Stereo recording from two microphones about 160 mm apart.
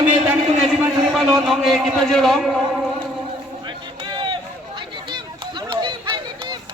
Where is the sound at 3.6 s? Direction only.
30° right (ahead or behind).